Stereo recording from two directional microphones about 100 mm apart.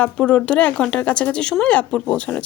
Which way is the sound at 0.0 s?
10° left (ahead or behind).